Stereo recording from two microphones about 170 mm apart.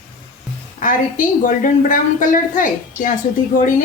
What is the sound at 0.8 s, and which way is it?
A woman's voice, 50° left (ahead or behind).